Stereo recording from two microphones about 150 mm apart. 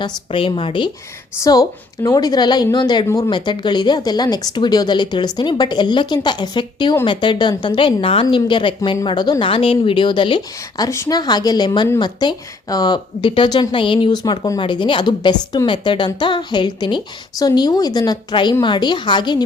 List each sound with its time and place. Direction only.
0.0 s speech: 35° left (ahead or behind)
1.4 s speech: 25° left (ahead or behind)
10.8 s speech: 20° left (ahead or behind)